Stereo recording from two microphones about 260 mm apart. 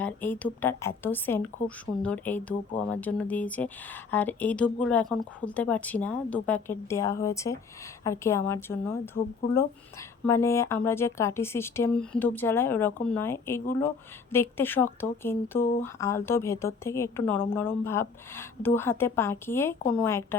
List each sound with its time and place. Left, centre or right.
0.0 s a woman's voice: centre
10.2 s a woman's voice: centre